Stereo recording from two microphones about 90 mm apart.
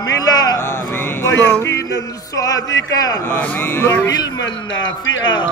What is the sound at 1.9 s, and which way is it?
Speech, 40° left (ahead or behind).